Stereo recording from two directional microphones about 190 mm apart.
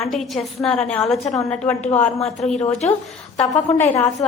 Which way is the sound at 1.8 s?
35° left (ahead or behind).